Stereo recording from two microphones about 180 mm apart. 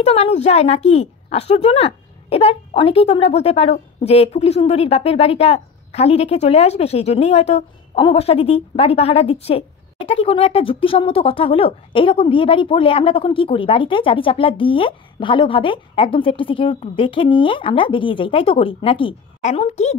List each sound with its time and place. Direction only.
0.0 s a woman's voice: 35° left (ahead or behind)